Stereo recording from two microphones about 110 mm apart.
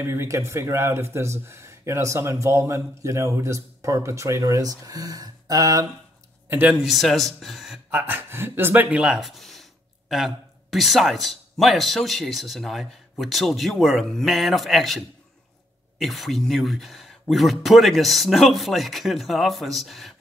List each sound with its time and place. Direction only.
0.0 s speech: 20° right (ahead or behind)
6.5 s speech: 15° right (ahead or behind)
6.8 s speech: centre (ahead or behind)
8.0 s speech: 20° right (ahead or behind); by 20.2 s centre (ahead or behind)